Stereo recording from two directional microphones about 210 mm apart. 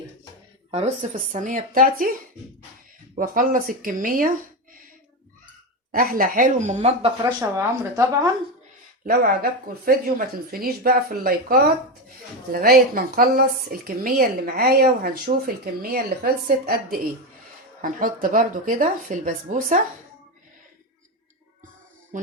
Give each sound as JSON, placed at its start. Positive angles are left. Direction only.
{"t": 0.7, "sound": "speech", "side_deg": -35}
{"t": 3.2, "sound": "speech", "side_deg": -40}
{"t": 5.9, "sound": "speech", "side_deg": -45}
{"t": 7.2, "sound": "speech", "side_deg": -15}
{"t": 9.0, "sound": "a woman's voice", "side_deg": -45}
{"t": 22.1, "sound": "music", "side_deg": -35}